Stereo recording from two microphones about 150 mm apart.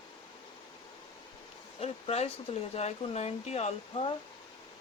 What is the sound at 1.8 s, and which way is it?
Speech, 45° left (ahead or behind).